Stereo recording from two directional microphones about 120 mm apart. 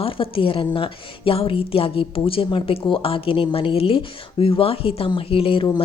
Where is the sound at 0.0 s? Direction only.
50° left (ahead or behind).